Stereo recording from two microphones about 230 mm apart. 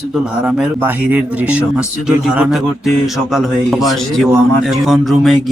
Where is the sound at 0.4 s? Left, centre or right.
Centre.